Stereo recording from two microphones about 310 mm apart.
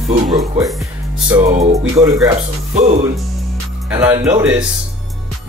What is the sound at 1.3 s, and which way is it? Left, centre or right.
Speech, centre.